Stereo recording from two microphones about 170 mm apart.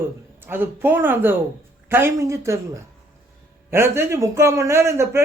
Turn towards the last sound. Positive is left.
turn(degrees=-15)  # may be behind; listen again after turning